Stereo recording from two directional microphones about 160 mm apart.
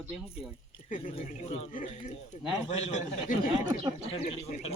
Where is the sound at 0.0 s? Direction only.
10° right (ahead or behind).